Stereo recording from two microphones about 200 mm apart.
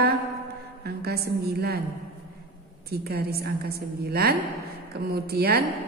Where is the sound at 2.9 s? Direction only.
50° right (ahead or behind).